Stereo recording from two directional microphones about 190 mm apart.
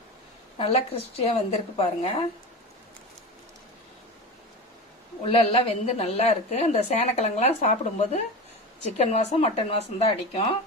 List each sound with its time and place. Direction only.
1.2 s a woman's voice: 30° left (ahead or behind)
5.2 s a woman's voice: 30° left (ahead or behind)